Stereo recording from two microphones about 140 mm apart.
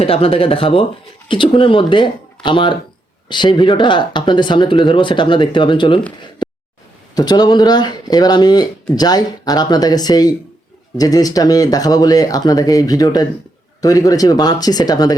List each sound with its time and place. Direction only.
0.0 s speech: 45° left (ahead or behind)
7.2 s speech: 30° left (ahead or behind)